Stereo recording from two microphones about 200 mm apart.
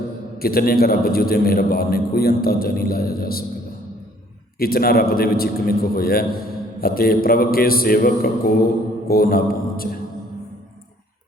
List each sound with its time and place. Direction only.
0.3 s a man's voice: 50° left (ahead or behind)
4.6 s a man's voice: 50° left (ahead or behind)